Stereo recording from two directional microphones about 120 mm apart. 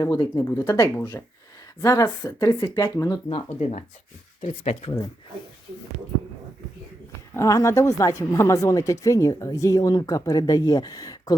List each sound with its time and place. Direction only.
0.0 s speech: 30° left (ahead or behind)
3.6 s speech: 70° left (ahead or behind)
7.3 s speech: 25° left (ahead or behind)